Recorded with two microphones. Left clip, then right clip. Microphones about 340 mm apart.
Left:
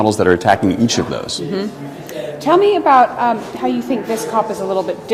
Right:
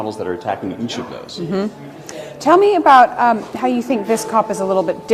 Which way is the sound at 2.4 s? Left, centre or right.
Right.